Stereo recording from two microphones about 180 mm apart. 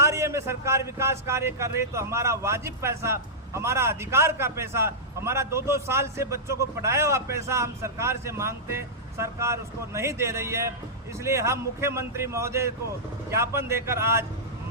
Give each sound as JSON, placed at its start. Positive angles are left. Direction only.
{"t": 0.0, "sound": "a man's voice", "side_deg": -15}